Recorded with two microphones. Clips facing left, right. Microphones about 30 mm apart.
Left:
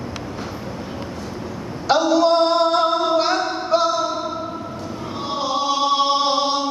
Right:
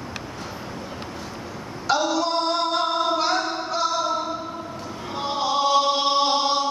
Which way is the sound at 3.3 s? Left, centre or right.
Centre.